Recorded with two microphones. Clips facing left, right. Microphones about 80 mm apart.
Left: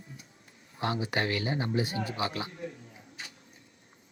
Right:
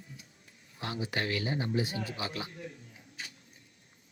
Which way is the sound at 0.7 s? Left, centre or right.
Left.